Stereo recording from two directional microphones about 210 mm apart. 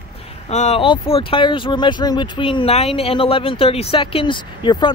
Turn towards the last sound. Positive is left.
turn(degrees=20)  # may be behind; listen again after turning